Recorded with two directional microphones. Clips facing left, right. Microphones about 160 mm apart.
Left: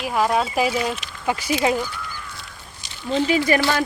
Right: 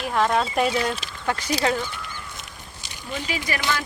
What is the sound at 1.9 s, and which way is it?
Goose, 20° right (ahead or behind).